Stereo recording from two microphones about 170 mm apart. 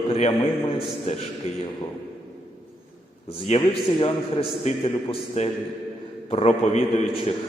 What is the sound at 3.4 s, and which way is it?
A man's voice, 30° left (ahead or behind).